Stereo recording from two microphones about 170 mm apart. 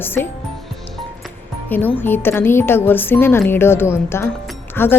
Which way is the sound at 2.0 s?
10° left (ahead or behind).